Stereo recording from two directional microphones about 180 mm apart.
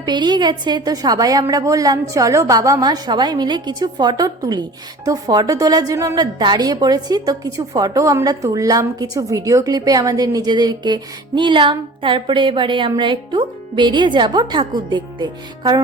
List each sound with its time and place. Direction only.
0.0 s a woman's voice: 25° right (ahead or behind)